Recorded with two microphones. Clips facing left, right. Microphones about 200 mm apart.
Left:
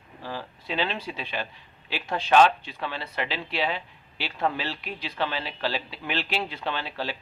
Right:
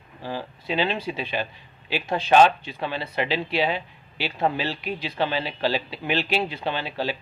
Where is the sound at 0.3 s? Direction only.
15° right (ahead or behind).